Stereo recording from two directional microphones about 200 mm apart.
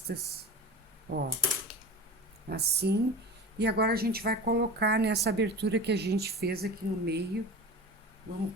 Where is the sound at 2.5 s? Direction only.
55° right (ahead or behind).